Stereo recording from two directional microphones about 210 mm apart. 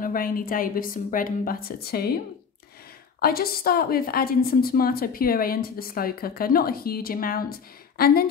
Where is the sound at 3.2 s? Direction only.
45° left (ahead or behind).